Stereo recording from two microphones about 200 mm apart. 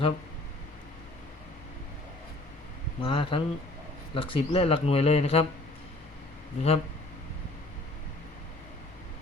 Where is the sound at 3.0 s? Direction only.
25° left (ahead or behind).